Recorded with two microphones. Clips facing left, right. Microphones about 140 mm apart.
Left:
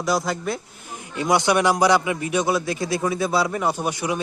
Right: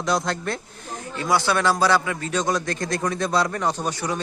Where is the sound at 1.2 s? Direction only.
20° left (ahead or behind).